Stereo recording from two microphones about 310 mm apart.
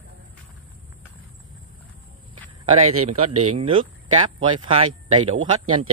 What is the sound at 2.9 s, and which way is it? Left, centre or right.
Speech, right.